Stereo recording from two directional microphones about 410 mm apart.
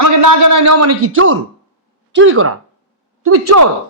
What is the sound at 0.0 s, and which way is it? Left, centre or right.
A man's voice, right.